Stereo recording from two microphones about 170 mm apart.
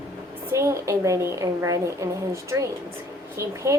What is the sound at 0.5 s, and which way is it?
A woman's voice, 15° right (ahead or behind).